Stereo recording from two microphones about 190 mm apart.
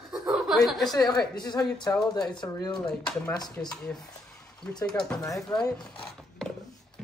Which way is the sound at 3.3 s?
20° left (ahead or behind).